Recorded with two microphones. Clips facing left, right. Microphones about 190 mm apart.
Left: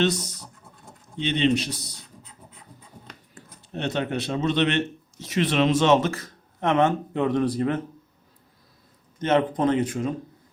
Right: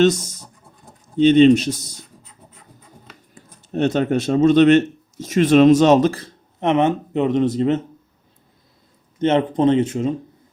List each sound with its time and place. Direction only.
0.0 s speech: 45° right (ahead or behind)
0.4 s scratch: centre (ahead or behind)
1.2 s speech: 45° right (ahead or behind)
3.7 s speech: 45° right (ahead or behind)
6.6 s speech: 20° right (ahead or behind)
9.1 s speech: 25° right (ahead or behind)